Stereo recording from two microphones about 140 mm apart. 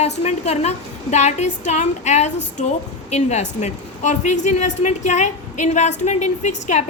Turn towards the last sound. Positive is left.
turn(degrees=55)  # may be behind; listen again after turning